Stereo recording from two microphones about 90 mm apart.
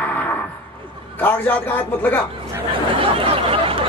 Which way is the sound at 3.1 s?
90° right.